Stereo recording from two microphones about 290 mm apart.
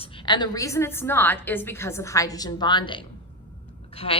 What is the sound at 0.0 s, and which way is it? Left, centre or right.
A woman's voice, centre.